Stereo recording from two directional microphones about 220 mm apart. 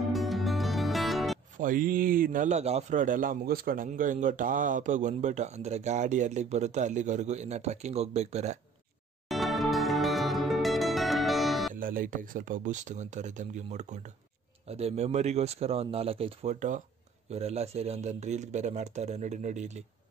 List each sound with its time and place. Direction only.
0.0 s music: centre (ahead or behind)
1.6 s a man's voice: 40° right (ahead or behind)
9.3 s music: centre (ahead or behind)
11.7 s a man's voice: 40° right (ahead or behind)